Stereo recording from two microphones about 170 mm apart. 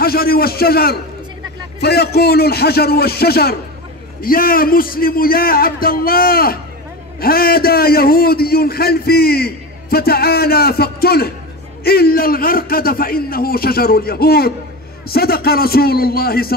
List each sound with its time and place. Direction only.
0.0 s a man's voice: 65° left (ahead or behind)